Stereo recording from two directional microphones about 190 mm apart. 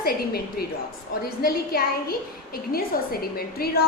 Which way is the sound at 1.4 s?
50° left (ahead or behind).